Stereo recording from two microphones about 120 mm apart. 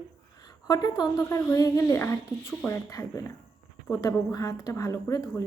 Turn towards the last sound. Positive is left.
turn(degrees=30)  # may be behind; listen again after turning